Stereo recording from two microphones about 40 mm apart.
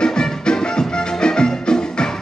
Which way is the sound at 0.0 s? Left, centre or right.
Centre.